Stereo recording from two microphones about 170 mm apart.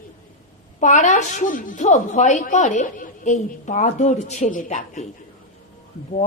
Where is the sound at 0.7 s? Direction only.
45° left (ahead or behind).